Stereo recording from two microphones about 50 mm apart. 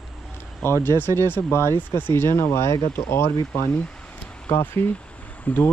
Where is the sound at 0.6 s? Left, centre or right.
Left.